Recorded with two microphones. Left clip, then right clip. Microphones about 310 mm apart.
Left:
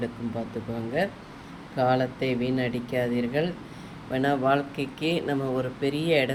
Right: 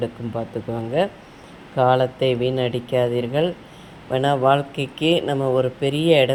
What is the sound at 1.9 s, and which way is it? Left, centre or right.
Speech, centre.